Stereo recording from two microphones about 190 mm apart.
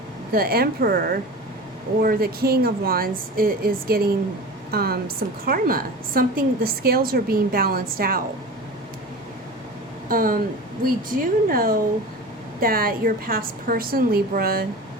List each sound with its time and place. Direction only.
0.3 s a woman's voice: 50° right (ahead or behind)
10.1 s a woman's voice: 50° right (ahead or behind)